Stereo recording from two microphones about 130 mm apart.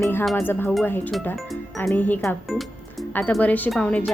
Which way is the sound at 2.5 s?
Centre (ahead or behind).